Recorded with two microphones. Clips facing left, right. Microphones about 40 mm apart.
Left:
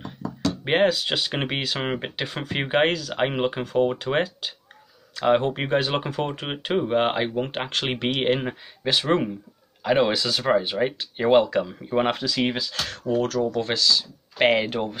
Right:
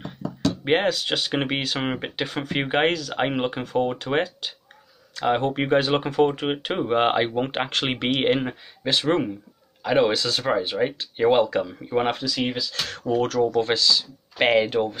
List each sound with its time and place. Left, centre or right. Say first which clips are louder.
0.7 s speech: left 2 dB; centre
12.4 s speech: left 1 dB; left
13.0 s speech: right 2 dB; centre